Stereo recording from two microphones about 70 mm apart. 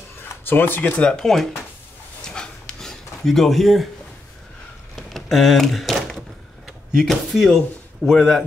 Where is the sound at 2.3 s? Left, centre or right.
Centre.